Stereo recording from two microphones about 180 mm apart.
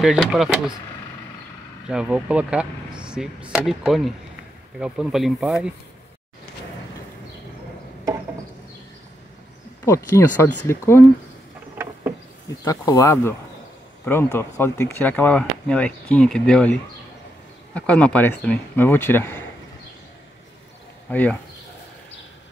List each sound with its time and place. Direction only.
0.0 s speech: centre (ahead or behind)
1.9 s speech: 5° right (ahead or behind)
9.8 s speech: 15° left (ahead or behind)
12.4 s speech: 20° left (ahead or behind)
17.7 s speech: 5° left (ahead or behind)
21.1 s speech: 10° left (ahead or behind)